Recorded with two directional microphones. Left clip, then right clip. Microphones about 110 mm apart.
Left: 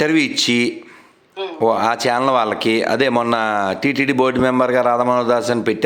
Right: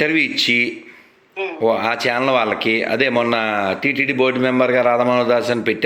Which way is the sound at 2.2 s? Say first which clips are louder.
Left 1 dB; 45° left (ahead or behind).